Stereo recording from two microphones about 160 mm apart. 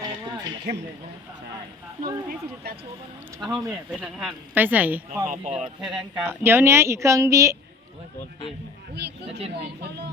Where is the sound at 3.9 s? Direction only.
5° right (ahead or behind).